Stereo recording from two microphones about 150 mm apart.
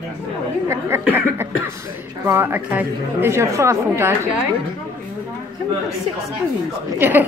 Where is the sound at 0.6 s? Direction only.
15° right (ahead or behind).